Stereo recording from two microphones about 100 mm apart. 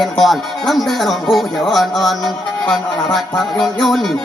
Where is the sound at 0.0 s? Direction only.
Centre (ahead or behind).